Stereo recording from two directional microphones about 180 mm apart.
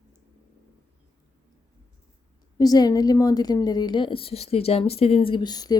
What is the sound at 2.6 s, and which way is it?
A woman's voice, 20° left (ahead or behind).